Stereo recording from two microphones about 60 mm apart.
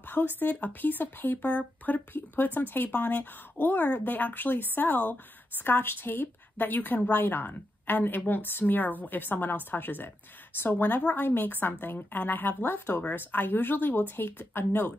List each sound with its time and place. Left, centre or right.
0.1 s speech: left